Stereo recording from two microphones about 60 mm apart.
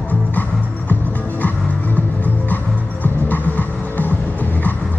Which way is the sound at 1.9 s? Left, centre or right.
Left.